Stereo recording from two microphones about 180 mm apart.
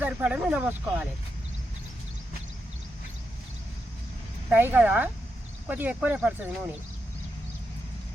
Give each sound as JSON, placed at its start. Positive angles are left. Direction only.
{"t": 0.0, "sound": "speech", "side_deg": -10}
{"t": 4.4, "sound": "speech", "side_deg": -10}